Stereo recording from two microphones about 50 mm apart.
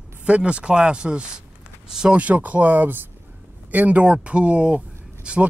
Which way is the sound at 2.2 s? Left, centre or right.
Right.